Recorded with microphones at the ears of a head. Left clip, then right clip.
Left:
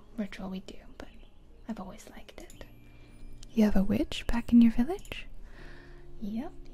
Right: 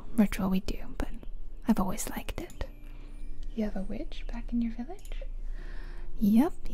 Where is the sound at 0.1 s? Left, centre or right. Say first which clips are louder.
Right 10 dB; right.